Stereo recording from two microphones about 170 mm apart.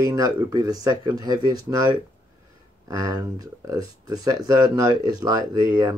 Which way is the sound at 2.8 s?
20° right (ahead or behind).